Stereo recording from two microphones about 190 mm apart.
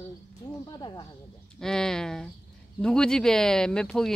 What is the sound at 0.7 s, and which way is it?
Speech, 20° left (ahead or behind).